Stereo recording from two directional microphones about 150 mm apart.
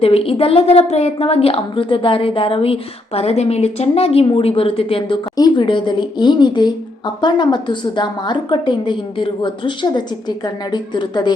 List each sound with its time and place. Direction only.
0.0 s a woman's voice: 40° left (ahead or behind)